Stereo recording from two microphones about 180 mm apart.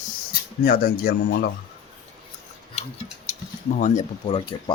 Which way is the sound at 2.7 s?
40° left (ahead or behind).